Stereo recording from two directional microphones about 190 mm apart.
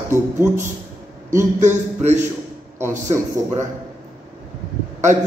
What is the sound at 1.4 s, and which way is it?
Speech, 40° right (ahead or behind).